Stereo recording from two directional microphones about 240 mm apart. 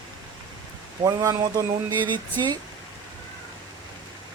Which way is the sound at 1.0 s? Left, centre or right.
Centre.